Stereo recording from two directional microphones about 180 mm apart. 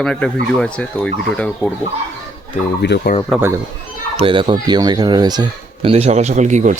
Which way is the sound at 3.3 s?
Centre (ahead or behind).